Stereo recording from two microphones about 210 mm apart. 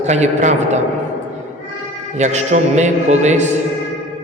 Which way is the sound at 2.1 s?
30° right (ahead or behind).